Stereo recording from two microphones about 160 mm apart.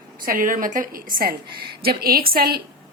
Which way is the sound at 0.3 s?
60° right (ahead or behind).